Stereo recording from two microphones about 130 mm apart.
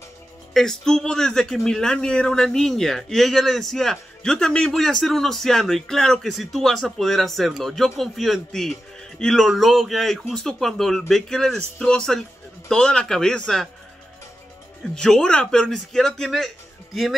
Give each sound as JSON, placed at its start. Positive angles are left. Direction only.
{"t": 0.5, "sound": "a man's voice", "side_deg": 5}
{"t": 15.0, "sound": "a man's voice", "side_deg": 5}